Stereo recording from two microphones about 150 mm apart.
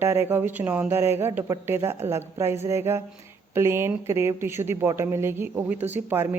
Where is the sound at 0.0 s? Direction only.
15° right (ahead or behind).